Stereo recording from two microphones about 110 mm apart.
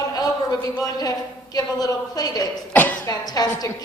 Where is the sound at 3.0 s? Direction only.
35° left (ahead or behind).